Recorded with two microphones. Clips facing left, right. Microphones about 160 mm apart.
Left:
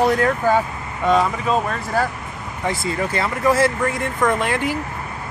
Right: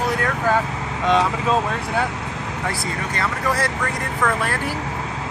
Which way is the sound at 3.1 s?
25° left (ahead or behind).